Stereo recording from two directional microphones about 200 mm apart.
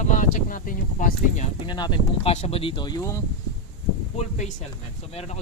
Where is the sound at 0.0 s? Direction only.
40° left (ahead or behind).